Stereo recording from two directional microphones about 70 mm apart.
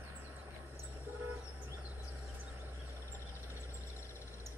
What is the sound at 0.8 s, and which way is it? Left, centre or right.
Vehicle, right.